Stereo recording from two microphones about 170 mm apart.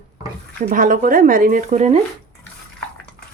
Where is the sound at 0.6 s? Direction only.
55° right (ahead or behind).